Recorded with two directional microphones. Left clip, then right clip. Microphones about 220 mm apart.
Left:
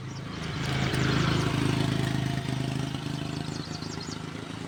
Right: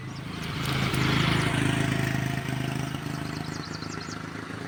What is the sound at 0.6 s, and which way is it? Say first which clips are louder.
Vehicle: right 2 dB; 45° right (ahead or behind).